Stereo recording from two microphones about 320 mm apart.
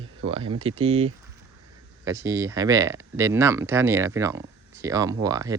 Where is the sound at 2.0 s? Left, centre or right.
Centre.